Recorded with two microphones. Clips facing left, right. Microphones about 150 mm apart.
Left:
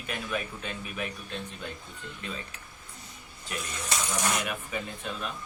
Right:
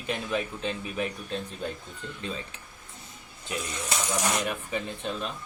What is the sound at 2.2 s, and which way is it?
Speech, 30° right (ahead or behind).